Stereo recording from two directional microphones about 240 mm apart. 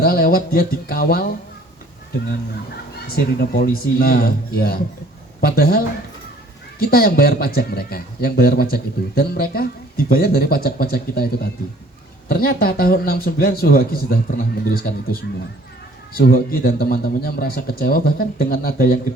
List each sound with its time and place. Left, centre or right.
0.0 s speech: left
3.2 s a man's voice: left